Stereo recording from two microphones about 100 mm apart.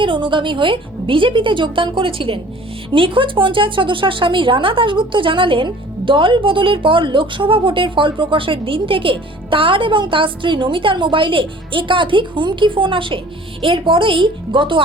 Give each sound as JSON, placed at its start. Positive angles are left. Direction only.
{"t": 0.0, "sound": "speech", "side_deg": -55}